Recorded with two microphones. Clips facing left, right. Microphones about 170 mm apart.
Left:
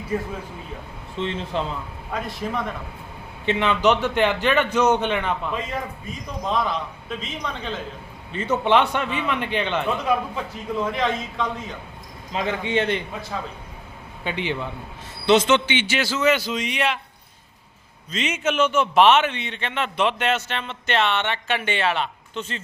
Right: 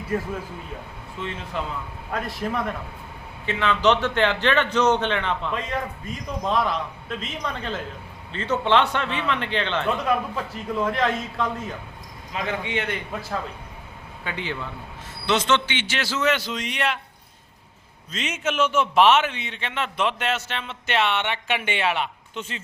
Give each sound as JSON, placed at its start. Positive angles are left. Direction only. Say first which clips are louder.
{"t": 1.2, "sound": "speech", "louder": "left 5 dB", "side_deg": 25}
{"t": 2.1, "sound": "a man's voice", "louder": "even", "side_deg": 0}
{"t": 3.4, "sound": "a man's voice", "louder": "left 1 dB", "side_deg": 20}
{"t": 8.3, "sound": "a man's voice", "louder": "left 2 dB", "side_deg": 15}
{"t": 10.1, "sound": "a man's voice", "louder": "left 1 dB", "side_deg": 0}
{"t": 12.3, "sound": "speech", "louder": "left 4 dB", "side_deg": 30}
{"t": 14.3, "sound": "a man's voice", "louder": "left 4 dB", "side_deg": 20}
{"t": 16.0, "sound": "a man's voice", "louder": "left 2 dB", "side_deg": 0}
{"t": 18.1, "sound": "a man's voice", "louder": "left 3 dB", "side_deg": 0}